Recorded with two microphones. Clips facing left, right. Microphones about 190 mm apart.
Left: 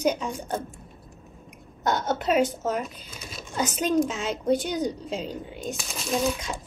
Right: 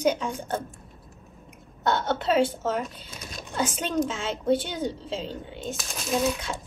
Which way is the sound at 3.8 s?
10° left (ahead or behind).